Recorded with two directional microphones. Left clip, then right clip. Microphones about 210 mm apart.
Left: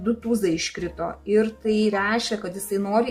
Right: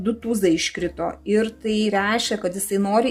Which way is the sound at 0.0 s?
40° right (ahead or behind).